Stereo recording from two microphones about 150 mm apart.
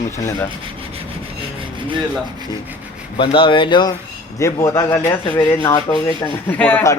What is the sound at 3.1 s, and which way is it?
Speech, 35° left (ahead or behind).